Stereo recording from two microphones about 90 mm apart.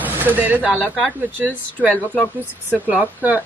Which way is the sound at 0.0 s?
20° right (ahead or behind).